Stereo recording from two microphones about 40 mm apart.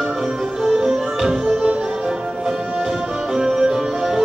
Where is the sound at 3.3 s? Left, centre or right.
Centre.